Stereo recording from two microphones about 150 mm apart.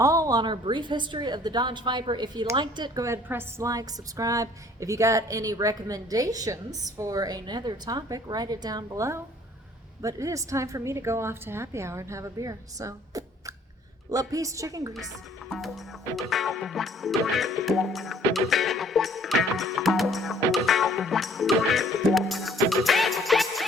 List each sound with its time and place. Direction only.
0.0 s a woman's voice: 20° right (ahead or behind)
15.4 s music: centre (ahead or behind)